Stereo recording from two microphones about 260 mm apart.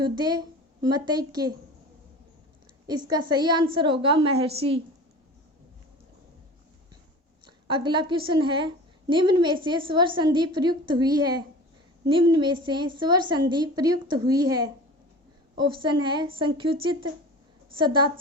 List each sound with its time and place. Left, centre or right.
0.0 s a woman's voice: centre
2.8 s a woman's voice: centre
7.4 s a woman's voice: centre